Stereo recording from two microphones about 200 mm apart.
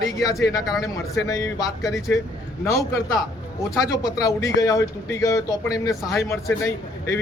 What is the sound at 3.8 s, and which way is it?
A man's voice, 20° left (ahead or behind).